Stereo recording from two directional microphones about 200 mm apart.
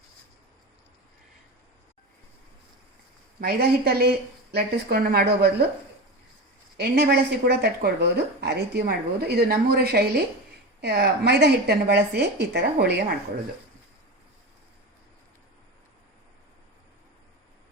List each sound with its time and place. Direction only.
3.4 s a woman's voice: 50° right (ahead or behind)
6.7 s a woman's voice: 50° right (ahead or behind)